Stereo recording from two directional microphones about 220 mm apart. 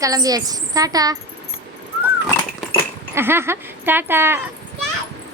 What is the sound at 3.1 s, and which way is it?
Speech, 10° right (ahead or behind).